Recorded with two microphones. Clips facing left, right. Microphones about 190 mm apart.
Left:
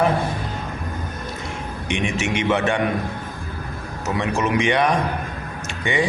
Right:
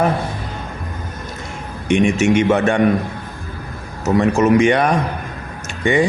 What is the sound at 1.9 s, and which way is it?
Speech, 45° right (ahead or behind).